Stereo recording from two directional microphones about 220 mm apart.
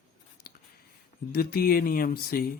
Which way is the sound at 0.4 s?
45° left (ahead or behind).